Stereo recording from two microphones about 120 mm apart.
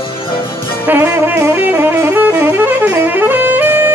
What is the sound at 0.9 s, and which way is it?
Saxophone, 15° right (ahead or behind).